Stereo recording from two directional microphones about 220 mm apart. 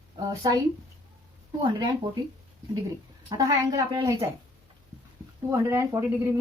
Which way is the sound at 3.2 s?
15° right (ahead or behind).